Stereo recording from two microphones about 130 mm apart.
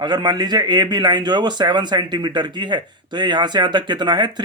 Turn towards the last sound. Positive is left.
turn(degrees=-35)  # may be behind; listen again after turning